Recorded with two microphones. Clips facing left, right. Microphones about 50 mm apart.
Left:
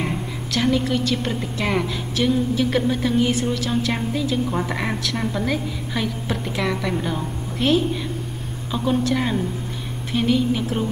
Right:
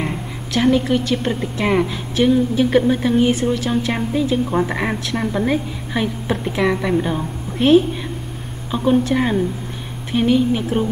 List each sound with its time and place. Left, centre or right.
0.0 s a woman's voice: centre